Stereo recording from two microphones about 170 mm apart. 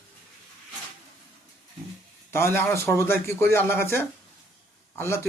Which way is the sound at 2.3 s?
15° left (ahead or behind).